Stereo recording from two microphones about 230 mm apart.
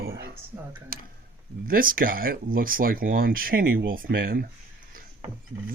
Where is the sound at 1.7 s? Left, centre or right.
Right.